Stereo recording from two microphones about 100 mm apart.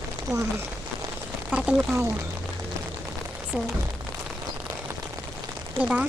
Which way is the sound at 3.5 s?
15° right (ahead or behind).